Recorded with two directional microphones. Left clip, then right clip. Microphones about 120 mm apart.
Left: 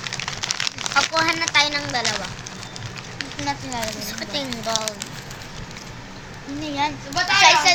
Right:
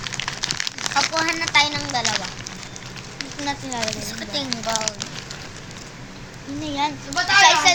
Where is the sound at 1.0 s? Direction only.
30° left (ahead or behind).